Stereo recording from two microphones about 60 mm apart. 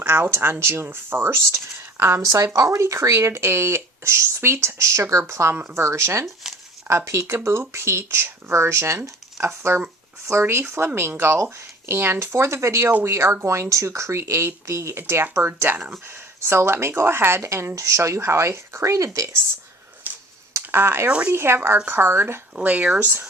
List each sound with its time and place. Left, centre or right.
0.0 s speech: right
6.4 s a sound: centre
6.8 s speech: right
20.1 s a sound: right
20.6 s speech: right
21.1 s speech: right
21.3 s speech: right
22.6 s speech: right
23.0 s speech: right